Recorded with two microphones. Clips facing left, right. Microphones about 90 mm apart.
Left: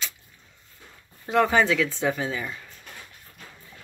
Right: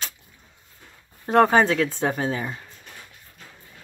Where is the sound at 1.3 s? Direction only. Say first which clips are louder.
Right 4 dB; 40° right (ahead or behind).